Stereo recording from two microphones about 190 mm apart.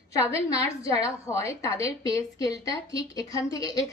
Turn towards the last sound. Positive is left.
turn(degrees=20)  # may be behind; listen again after turning